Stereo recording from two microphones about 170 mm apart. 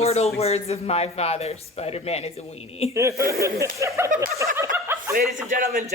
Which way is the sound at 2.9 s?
15° right (ahead or behind).